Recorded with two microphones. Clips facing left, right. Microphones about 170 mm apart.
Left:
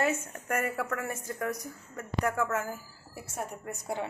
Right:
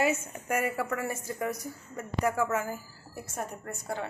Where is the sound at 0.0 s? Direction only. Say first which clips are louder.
Right 1 dB; 5° right (ahead or behind).